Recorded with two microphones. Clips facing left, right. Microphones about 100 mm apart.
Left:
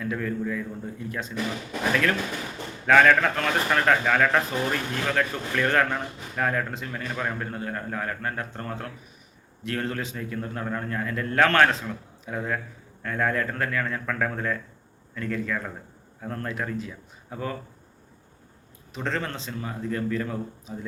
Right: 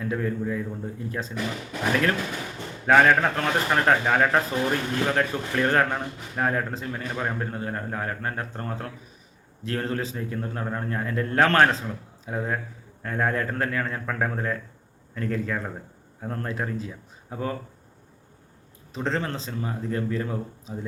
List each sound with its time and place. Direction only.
0.0 s speech: 30° right (ahead or behind)
18.9 s speech: 30° right (ahead or behind)